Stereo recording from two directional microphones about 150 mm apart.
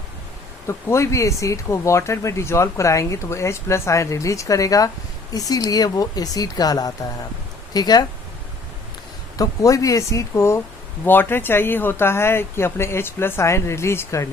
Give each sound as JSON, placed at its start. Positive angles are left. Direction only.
{"t": 0.7, "sound": "speech", "side_deg": 20}
{"t": 9.4, "sound": "speech", "side_deg": 20}